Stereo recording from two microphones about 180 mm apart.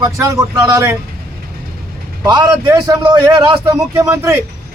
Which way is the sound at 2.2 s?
25° right (ahead or behind).